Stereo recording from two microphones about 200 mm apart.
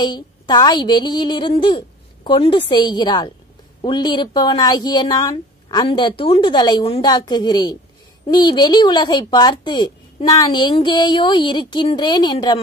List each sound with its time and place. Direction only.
0.0 s speech: 20° left (ahead or behind)